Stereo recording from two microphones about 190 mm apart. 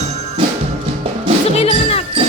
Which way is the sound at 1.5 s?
30° left (ahead or behind).